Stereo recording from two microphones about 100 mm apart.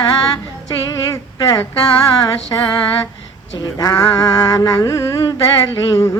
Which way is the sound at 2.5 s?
40° left (ahead or behind).